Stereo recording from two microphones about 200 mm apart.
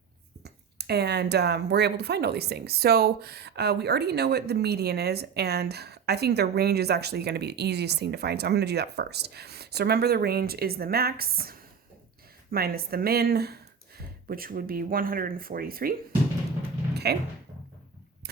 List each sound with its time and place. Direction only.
0.4 s speech: 55° right (ahead or behind)
16.9 s music: 55° right (ahead or behind)